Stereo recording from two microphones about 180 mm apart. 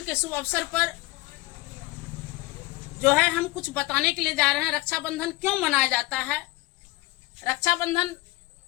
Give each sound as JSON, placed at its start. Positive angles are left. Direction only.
{"t": 0.1, "sound": "a woman's voice", "side_deg": 10}
{"t": 3.0, "sound": "a woman's voice", "side_deg": 5}
{"t": 7.4, "sound": "a woman's voice", "side_deg": 20}